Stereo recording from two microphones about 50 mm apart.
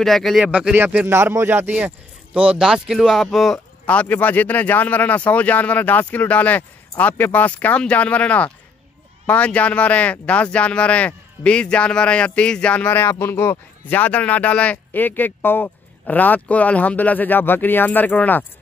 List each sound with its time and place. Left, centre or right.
0.0 s speech: centre
1.0 s speech: right
1.5 s speech: right
2.6 s speech: centre
3.8 s speech: left
4.1 s speech: left
13.1 s speech: left
13.8 s speech: left
14.9 s speech: left